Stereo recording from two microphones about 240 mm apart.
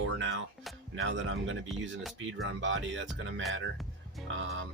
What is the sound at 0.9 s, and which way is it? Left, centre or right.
Speech, right.